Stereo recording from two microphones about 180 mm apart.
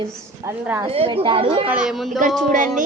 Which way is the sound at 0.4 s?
15° right (ahead or behind).